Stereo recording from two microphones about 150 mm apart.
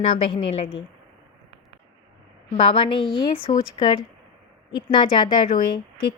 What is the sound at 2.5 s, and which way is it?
A woman's voice, 35° left (ahead or behind).